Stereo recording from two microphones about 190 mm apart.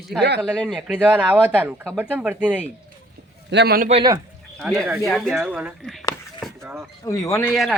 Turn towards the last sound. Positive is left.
turn(degrees=0)  # may be behind; listen again after turning